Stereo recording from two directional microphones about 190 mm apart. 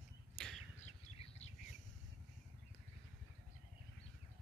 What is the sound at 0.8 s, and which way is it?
Bird, 35° left (ahead or behind).